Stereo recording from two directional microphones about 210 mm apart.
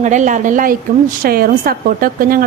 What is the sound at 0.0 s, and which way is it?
A woman's voice, 35° right (ahead or behind).